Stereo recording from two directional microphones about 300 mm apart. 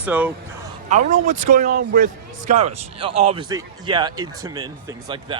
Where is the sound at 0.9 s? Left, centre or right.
Right.